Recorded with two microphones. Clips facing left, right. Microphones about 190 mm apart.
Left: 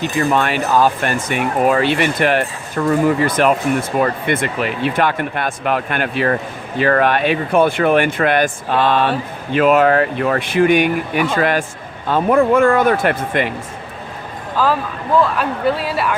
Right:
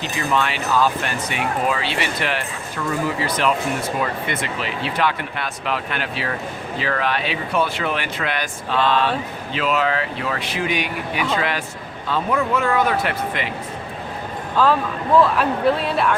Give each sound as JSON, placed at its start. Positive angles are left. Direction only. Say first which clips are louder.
{"t": 0.0, "sound": "speech", "louder": "left 5 dB", "side_deg": 50}
{"t": 14.6, "sound": "speech", "louder": "even", "side_deg": 5}